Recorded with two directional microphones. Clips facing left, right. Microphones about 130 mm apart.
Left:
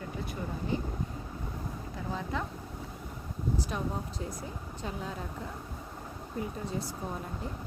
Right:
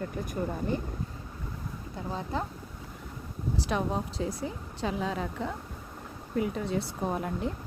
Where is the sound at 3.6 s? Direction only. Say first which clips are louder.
Right 5 dB; 85° right.